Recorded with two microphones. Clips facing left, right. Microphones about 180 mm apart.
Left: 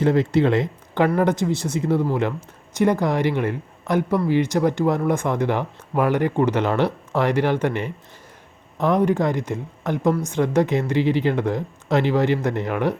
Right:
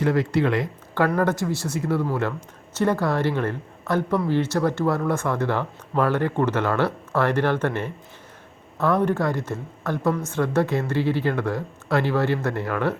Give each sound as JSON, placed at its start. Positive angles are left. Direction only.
{"t": 0.0, "sound": "speech", "side_deg": 25}